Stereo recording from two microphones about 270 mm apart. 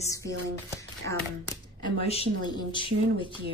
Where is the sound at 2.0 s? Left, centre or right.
Left.